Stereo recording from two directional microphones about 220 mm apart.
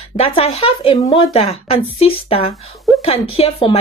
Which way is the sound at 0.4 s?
25° left (ahead or behind).